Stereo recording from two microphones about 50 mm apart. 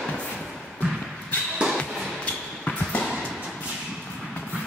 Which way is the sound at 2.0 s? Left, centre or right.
Left.